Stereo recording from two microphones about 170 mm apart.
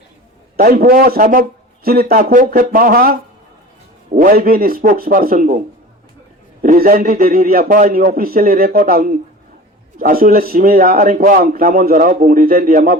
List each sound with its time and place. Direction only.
0.5 s a man's voice: 65° right (ahead or behind)
6.6 s a man's voice: 55° right (ahead or behind)